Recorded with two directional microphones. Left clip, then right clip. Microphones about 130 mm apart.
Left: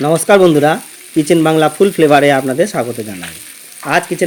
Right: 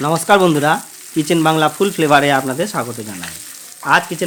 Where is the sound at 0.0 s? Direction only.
15° left (ahead or behind).